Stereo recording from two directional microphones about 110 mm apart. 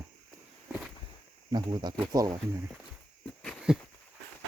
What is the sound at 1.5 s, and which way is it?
Speech, 40° right (ahead or behind).